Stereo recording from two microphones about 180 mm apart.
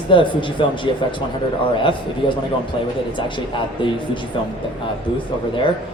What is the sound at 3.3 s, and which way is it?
Speech, 25° left (ahead or behind).